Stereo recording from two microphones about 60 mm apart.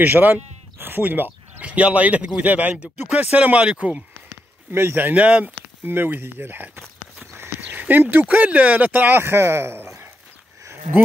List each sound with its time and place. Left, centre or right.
0.0 s speech: right
4.7 s speech: right
5.1 s speech: right
5.9 s speech: right
7.3 s horse: right
8.3 s speech: right
9.2 s speech: right